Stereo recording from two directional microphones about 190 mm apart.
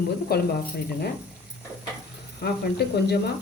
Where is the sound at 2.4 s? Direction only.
55° left (ahead or behind).